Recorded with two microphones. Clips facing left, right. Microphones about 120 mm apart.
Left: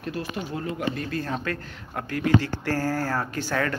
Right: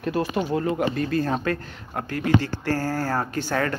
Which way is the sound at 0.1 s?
65° right (ahead or behind).